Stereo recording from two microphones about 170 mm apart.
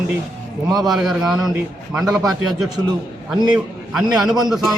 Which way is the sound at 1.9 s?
20° right (ahead or behind).